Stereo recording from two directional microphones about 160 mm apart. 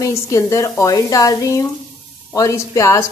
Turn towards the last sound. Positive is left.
turn(degrees=20)  # may be behind; listen again after turning